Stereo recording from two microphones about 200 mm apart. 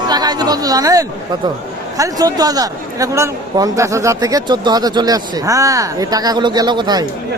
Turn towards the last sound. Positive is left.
turn(degrees=-20)  # may be behind; listen again after turning